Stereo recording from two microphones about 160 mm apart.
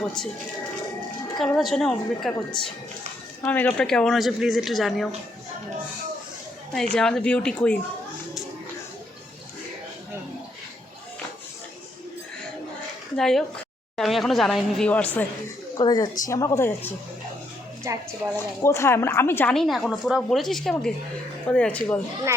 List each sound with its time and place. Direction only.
0.0 s speech: 5° left (ahead or behind)
1.5 s a woman's voice: centre (ahead or behind)
6.9 s speech: 5° left (ahead or behind)
13.1 s a woman's voice: 5° left (ahead or behind)
15.8 s a woman's voice: 25° left (ahead or behind)
17.9 s speech: 20° right (ahead or behind)
18.3 s speech: 15° left (ahead or behind)
19.5 s a woman's voice: centre (ahead or behind)